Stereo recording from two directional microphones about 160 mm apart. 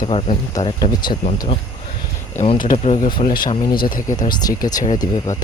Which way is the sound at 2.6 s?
55° left (ahead or behind).